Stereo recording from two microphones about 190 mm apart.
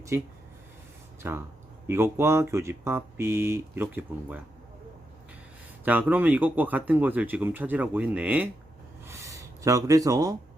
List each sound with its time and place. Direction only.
0.1 s a man's voice: 15° right (ahead or behind)
5.8 s a man's voice: 10° right (ahead or behind)